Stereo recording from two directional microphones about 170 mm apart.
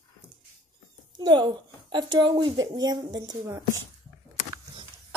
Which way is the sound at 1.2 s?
30° right (ahead or behind).